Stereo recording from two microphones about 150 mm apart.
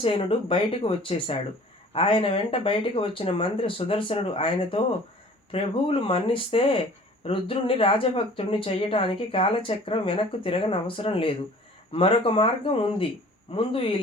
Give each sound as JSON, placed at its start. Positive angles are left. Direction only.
{"t": 0.0, "sound": "speech", "side_deg": 40}